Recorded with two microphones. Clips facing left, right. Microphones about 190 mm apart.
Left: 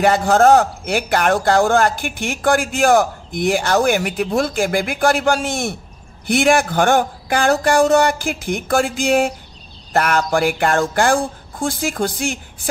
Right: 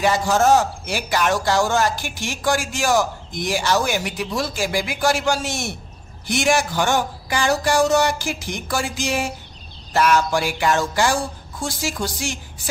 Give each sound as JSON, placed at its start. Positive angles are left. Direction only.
{"t": 0.0, "sound": "a man's voice", "side_deg": 55}